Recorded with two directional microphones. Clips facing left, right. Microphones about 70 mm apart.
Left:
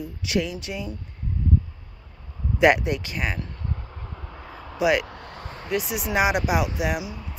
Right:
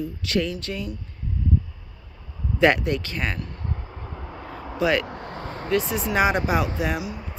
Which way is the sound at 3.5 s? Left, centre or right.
Right.